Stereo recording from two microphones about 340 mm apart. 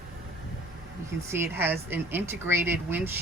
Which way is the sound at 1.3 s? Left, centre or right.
Centre.